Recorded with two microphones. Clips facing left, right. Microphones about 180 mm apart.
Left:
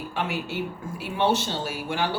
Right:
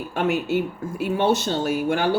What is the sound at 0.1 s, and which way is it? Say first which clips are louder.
Speech: right 9 dB; 45° right (ahead or behind).